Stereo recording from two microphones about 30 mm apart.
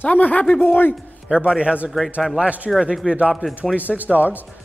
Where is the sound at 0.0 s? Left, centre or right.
Left.